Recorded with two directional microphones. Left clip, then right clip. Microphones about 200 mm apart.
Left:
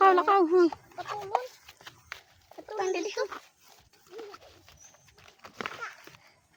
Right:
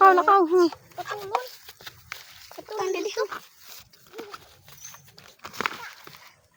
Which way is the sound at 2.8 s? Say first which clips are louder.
Right 3 dB; centre (ahead or behind).